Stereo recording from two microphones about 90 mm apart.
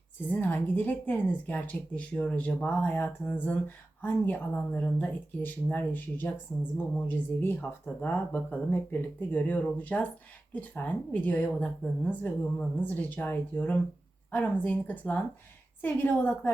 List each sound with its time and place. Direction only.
0.3 s a woman's voice: 20° left (ahead or behind)